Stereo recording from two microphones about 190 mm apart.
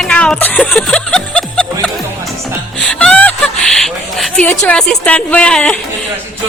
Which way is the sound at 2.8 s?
5° left (ahead or behind).